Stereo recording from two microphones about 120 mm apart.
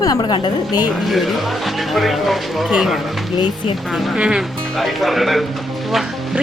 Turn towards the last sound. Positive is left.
turn(degrees=0)  # may be behind; listen again after turning